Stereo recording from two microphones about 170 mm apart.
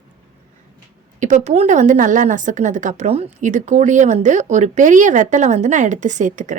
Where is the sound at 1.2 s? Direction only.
45° right (ahead or behind).